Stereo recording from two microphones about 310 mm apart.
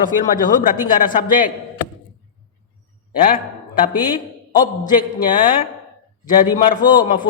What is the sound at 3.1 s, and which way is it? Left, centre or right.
Speech, left.